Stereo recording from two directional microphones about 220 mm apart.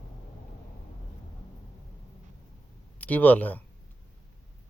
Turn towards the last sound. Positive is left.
turn(degrees=5)  # may be behind; listen again after turning